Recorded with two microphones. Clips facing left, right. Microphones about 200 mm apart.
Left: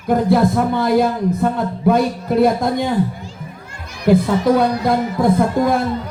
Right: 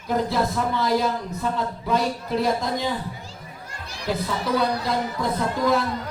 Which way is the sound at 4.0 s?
50° left (ahead or behind).